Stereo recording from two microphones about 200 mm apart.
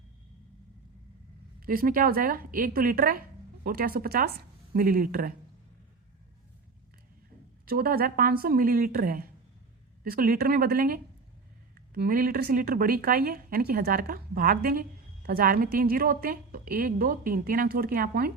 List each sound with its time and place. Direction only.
1.6 s a woman's voice: 45° right (ahead or behind)
7.6 s a woman's voice: 45° right (ahead or behind)